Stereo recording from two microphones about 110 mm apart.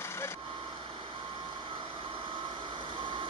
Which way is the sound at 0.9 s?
50° right (ahead or behind).